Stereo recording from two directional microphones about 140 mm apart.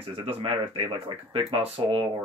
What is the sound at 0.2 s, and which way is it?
Speech, 45° right (ahead or behind).